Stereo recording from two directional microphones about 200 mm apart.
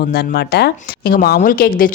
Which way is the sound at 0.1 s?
55° left (ahead or behind).